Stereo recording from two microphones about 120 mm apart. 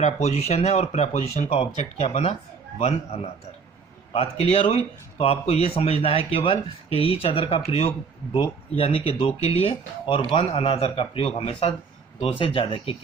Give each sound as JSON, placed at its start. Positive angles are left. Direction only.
{"t": 0.0, "sound": "a man's voice", "side_deg": 65}
{"t": 4.1, "sound": "speech", "side_deg": 50}